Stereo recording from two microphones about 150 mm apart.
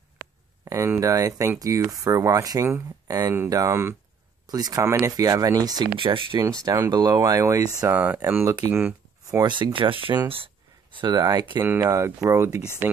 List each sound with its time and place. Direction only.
0.7 s speech: 20° right (ahead or behind)
5.9 s speech: 35° right (ahead or behind)
6.4 s speech: 20° right (ahead or behind)
7.9 s speech: 10° right (ahead or behind)
9.4 s speech: 30° right (ahead or behind)
11.6 s speech: 15° right (ahead or behind)